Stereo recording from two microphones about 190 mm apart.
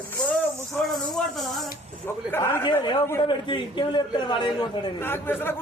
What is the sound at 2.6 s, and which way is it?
A man's voice, 25° left (ahead or behind).